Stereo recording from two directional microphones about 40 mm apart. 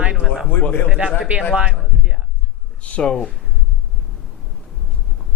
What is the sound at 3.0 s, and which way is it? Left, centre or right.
Speech, left.